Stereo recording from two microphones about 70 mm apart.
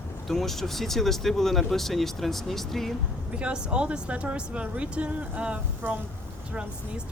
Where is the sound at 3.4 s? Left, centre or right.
Centre.